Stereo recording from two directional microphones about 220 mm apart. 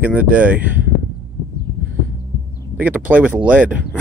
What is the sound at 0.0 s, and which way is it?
Speech, 5° right (ahead or behind).